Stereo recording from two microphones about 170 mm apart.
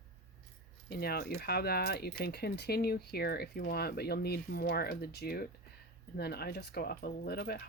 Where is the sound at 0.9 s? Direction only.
70° left (ahead or behind).